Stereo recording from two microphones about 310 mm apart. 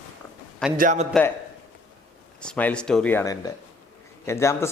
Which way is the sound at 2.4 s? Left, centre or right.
Centre.